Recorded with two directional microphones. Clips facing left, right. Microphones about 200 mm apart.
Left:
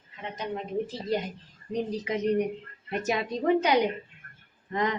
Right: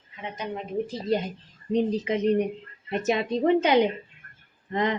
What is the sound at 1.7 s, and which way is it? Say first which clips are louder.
A woman's voice: right 5 dB; 25° right (ahead or behind).